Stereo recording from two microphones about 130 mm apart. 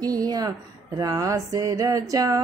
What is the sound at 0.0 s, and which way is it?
Mantra, 30° right (ahead or behind).